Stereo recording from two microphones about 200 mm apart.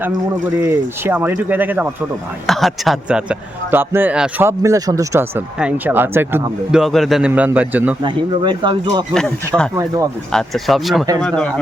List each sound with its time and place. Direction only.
0.6 s speech: 10° right (ahead or behind)
8.0 s speech: 25° right (ahead or behind)
10.3 s speech: centre (ahead or behind)